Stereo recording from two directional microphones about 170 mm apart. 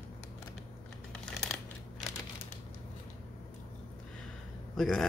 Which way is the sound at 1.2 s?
5° left (ahead or behind).